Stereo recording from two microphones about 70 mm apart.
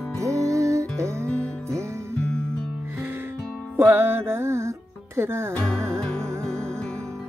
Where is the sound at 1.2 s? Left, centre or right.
Centre.